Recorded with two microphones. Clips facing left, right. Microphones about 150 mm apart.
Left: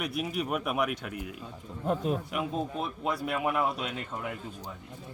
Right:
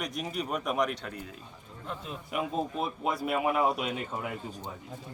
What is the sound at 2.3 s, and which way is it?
A man's voice, centre (ahead or behind).